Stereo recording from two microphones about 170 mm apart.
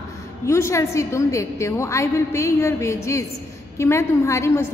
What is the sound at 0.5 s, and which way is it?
A woman's voice, 15° left (ahead or behind).